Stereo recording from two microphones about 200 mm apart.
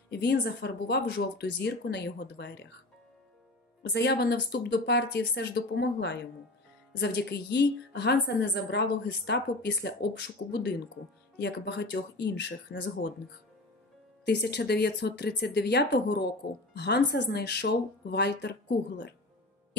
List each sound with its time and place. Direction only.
0.1 s a woman's voice: 55° left (ahead or behind)
3.9 s a woman's voice: 55° left (ahead or behind)
14.2 s a woman's voice: 55° left (ahead or behind)